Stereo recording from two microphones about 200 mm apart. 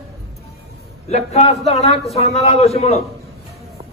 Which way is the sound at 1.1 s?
30° left (ahead or behind).